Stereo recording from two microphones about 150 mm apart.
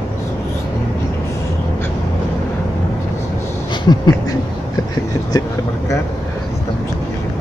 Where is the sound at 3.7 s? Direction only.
30° left (ahead or behind).